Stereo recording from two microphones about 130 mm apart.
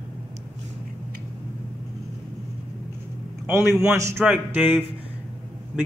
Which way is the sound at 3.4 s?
20° right (ahead or behind).